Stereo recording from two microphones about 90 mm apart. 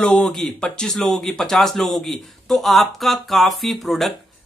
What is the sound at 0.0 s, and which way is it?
Speech, 10° left (ahead or behind).